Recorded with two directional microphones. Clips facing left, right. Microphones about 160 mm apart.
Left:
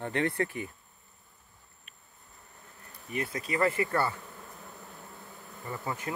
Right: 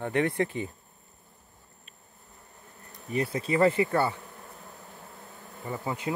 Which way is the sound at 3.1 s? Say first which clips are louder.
Right 5 dB; 30° right (ahead or behind).